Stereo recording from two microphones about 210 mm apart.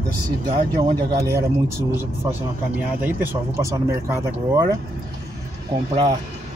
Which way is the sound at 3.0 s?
10° right (ahead or behind).